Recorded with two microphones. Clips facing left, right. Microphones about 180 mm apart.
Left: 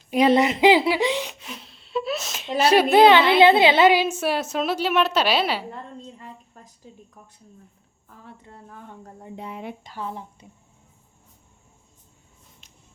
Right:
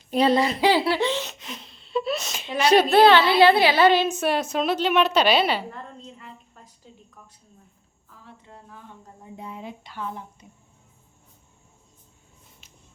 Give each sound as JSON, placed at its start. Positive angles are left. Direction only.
{"t": 0.1, "sound": "a woman's voice", "side_deg": 15}
{"t": 3.0, "sound": "a woman's voice", "side_deg": 15}
{"t": 5.7, "sound": "a sound", "side_deg": 35}
{"t": 8.7, "sound": "speech", "side_deg": 60}
{"t": 9.8, "sound": "speech", "side_deg": 35}